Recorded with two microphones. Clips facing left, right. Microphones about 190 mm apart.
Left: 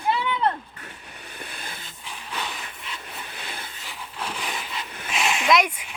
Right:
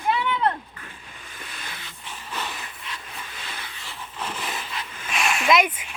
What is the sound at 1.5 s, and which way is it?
Dog, 50° left (ahead or behind).